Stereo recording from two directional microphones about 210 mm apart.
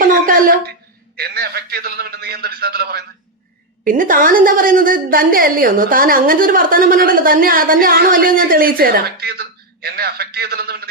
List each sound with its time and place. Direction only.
0.0 s a sound: 40° right (ahead or behind)
1.1 s a woman's voice: 50° right (ahead or behind)
3.8 s a woman's voice: 40° right (ahead or behind)